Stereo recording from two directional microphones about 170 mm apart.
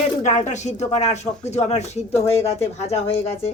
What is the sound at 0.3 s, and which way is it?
Speech, 45° left (ahead or behind).